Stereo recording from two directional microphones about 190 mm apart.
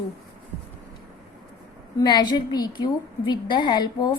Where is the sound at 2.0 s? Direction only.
25° left (ahead or behind).